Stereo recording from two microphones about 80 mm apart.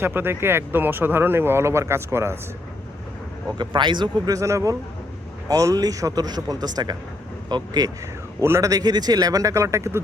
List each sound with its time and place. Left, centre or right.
0.0 s speech: right
3.6 s speech: right
4.3 s speech: right
8.4 s a man's voice: right
8.7 s speech: right